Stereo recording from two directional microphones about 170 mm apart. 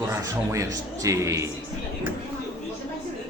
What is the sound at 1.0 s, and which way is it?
Speech, 20° right (ahead or behind).